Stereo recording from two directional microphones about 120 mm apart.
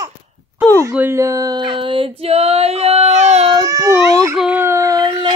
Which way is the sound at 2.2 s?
60° right (ahead or behind).